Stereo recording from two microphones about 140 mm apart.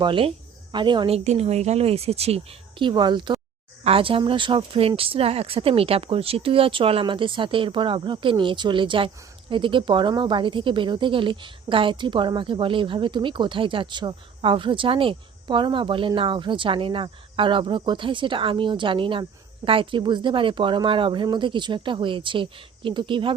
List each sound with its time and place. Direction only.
0.0 s speech: 40° right (ahead or behind)